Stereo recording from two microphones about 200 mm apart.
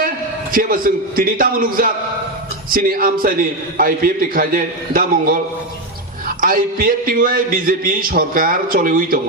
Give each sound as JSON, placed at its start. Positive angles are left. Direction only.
{"t": 0.5, "sound": "a man's voice", "side_deg": -45}